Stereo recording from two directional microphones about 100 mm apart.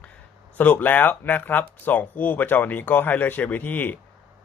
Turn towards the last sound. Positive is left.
turn(degrees=20)  # may be behind; listen again after turning